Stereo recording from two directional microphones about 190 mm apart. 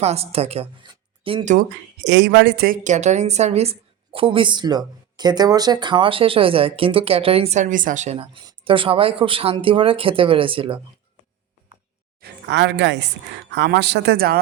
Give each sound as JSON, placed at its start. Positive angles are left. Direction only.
{"t": 0.0, "sound": "speech", "side_deg": -35}
{"t": 2.0, "sound": "a woman's voice", "side_deg": -65}
{"t": 12.2, "sound": "a woman's voice", "side_deg": -65}